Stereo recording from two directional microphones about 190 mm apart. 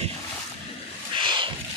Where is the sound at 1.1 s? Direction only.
25° right (ahead or behind).